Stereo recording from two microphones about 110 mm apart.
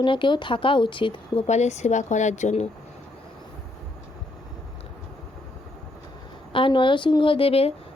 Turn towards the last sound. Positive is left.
turn(degrees=65)  # may be behind; listen again after turning